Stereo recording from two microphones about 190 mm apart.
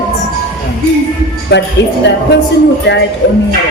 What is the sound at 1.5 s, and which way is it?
Speech, 60° left (ahead or behind).